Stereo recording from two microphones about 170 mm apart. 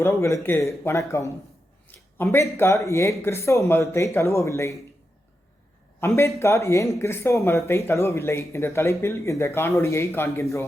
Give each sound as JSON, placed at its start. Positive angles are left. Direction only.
{"t": 0.0, "sound": "speech", "side_deg": 15}
{"t": 6.1, "sound": "speech", "side_deg": 15}